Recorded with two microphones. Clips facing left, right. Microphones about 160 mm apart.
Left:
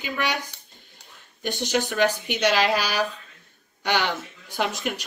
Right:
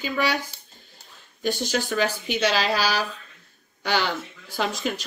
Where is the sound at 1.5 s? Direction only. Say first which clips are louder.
Left 1 dB; 15° left (ahead or behind).